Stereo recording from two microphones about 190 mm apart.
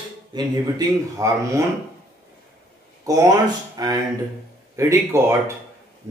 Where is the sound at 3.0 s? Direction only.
20° right (ahead or behind).